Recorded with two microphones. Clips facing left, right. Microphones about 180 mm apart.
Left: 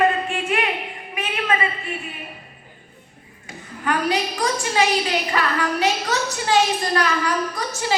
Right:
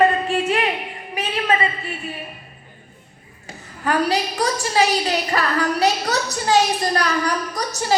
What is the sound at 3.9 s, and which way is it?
A woman's voice, 40° right (ahead or behind).